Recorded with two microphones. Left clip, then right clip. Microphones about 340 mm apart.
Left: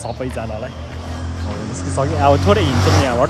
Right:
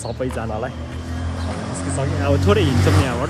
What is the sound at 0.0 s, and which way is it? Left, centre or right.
Speech, centre.